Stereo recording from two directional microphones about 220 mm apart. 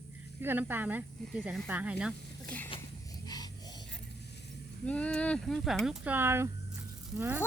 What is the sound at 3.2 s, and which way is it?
Snort, 15° left (ahead or behind).